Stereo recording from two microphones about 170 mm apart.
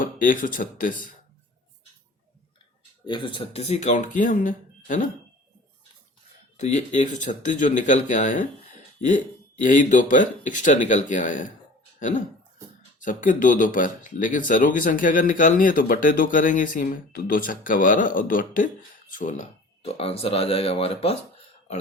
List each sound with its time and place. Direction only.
0.0 s speech: 55° left (ahead or behind)
3.1 s speech: 30° left (ahead or behind); by 5.0 s 50° left (ahead or behind)
6.6 s speech: 45° left (ahead or behind)
11.9 s cough: 50° left (ahead or behind)
13.0 s speech: 50° left (ahead or behind)
19.8 s speech: 35° left (ahead or behind)